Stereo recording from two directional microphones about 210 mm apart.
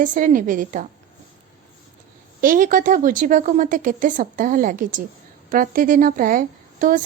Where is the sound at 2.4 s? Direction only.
40° right (ahead or behind).